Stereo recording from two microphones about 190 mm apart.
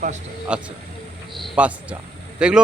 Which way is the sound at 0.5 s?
5° right (ahead or behind).